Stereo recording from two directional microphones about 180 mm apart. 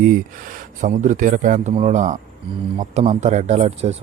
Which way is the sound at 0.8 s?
45° right (ahead or behind).